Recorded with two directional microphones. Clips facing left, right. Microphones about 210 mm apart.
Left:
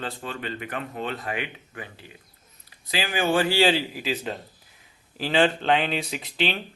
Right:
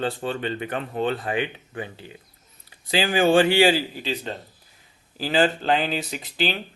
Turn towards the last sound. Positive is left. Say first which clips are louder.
# right 1 dB
turn(degrees=0)  # may be behind; listen again after turning